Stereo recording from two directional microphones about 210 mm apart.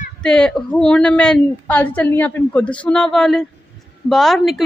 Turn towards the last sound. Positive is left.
turn(degrees=0)  # may be behind; listen again after turning